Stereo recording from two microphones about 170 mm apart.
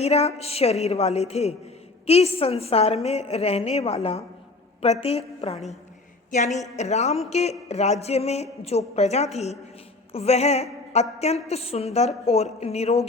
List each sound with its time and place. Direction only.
0.0 s a woman's voice: 40° left (ahead or behind)